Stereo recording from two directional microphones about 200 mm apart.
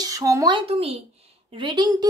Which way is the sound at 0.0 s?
15° right (ahead or behind).